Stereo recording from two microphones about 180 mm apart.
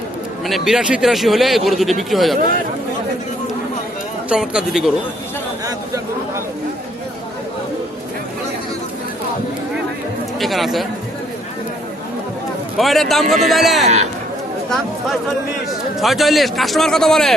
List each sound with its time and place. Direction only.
0.4 s a man's voice: centre (ahead or behind)
4.3 s a man's voice: 5° right (ahead or behind)
5.6 s a sound: 20° right (ahead or behind)
10.4 s a man's voice: centre (ahead or behind)
12.7 s a man's voice: centre (ahead or behind)
13.8 s speech: 40° right (ahead or behind)
14.7 s a man's voice: centre (ahead or behind)